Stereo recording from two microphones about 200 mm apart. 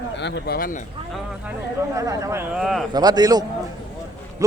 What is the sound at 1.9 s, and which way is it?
Speech, 15° right (ahead or behind).